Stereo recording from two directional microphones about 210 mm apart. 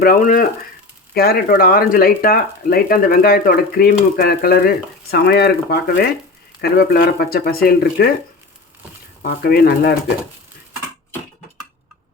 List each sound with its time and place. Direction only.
0.0 s speech: 45° left (ahead or behind)
9.2 s speech: 45° left (ahead or behind)